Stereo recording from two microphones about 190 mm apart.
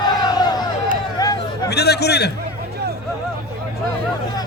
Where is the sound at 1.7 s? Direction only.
60° left (ahead or behind).